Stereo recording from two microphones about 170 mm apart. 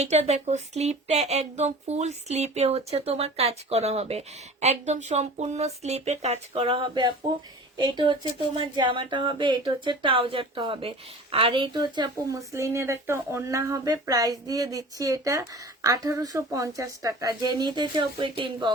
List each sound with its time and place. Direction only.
0.0 s speech: 40° right (ahead or behind)